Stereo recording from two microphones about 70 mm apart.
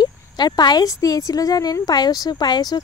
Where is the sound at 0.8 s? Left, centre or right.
Left.